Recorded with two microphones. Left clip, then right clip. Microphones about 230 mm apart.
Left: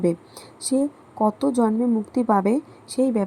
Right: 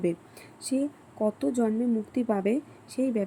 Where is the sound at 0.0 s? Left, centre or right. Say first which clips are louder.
Left 6 dB; centre.